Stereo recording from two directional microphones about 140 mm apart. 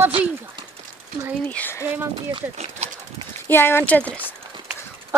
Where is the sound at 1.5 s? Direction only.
15° left (ahead or behind).